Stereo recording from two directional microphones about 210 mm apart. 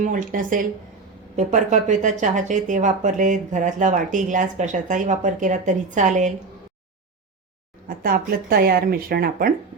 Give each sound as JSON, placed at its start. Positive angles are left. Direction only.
{"t": 0.0, "sound": "speech", "side_deg": -40}
{"t": 7.9, "sound": "speech", "side_deg": -45}